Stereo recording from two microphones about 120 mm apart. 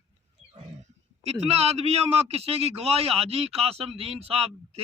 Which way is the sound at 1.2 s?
60° right (ahead or behind).